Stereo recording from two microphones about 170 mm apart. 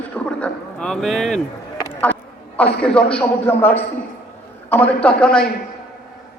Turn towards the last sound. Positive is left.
turn(degrees=5)  # may be behind; listen again after turning